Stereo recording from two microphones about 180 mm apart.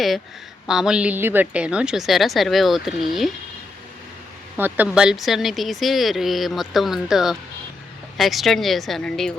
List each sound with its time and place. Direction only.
0.7 s speech: 5° right (ahead or behind)
4.5 s speech: 10° right (ahead or behind)